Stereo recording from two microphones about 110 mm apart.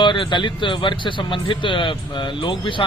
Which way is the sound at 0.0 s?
45° left (ahead or behind).